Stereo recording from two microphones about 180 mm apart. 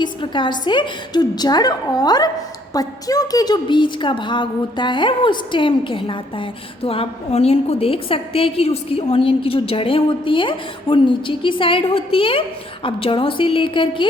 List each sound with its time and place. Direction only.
0.0 s a woman's voice: 25° left (ahead or behind)